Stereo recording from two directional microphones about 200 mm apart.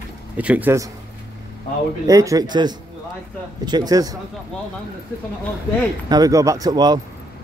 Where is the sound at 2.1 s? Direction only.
15° right (ahead or behind).